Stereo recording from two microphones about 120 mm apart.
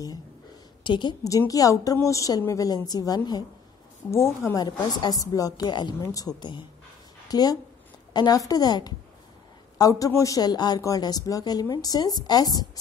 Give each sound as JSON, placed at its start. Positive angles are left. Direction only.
{"t": 0.8, "sound": "speech", "side_deg": 40}
{"t": 1.5, "sound": "speech", "side_deg": 30}
{"t": 4.6, "sound": "speech", "side_deg": 35}